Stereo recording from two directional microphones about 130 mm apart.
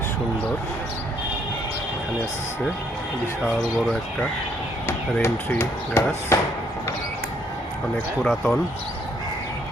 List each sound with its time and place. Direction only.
3.4 s speech: 5° left (ahead or behind)
5.2 s speech: 15° left (ahead or behind)
8.2 s speech: 5° left (ahead or behind)